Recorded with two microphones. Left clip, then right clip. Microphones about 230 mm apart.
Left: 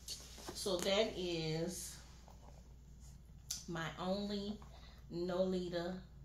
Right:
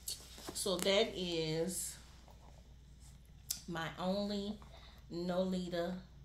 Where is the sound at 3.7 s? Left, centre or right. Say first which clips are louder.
Right 2 dB; right.